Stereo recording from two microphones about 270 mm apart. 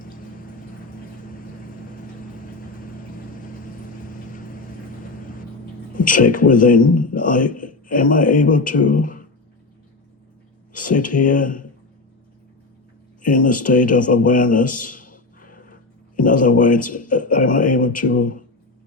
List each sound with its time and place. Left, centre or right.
4.3 s vehicle: left
5.9 s a man's voice: left
10.7 s speech: left
13.2 s a man's voice: left